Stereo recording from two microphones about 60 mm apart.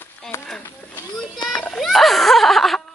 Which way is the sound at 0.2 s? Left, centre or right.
Centre.